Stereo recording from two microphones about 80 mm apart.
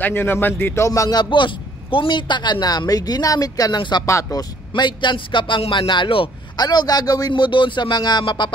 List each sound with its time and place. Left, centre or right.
0.0 s speech: left
0.8 s speech: left
1.1 s a man's voice: left
4.0 s speech: left
4.7 s a man's voice: left